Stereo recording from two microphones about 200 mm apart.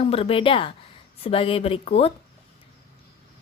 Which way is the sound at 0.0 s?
30° left (ahead or behind).